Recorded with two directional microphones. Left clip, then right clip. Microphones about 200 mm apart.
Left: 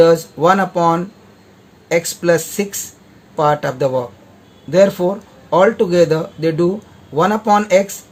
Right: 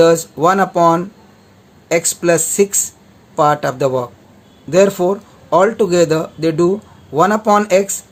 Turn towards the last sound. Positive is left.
turn(degrees=-20)  # may be behind; listen again after turning